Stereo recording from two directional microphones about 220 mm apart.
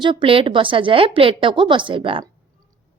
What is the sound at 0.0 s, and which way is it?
A woman's voice, 20° right (ahead or behind).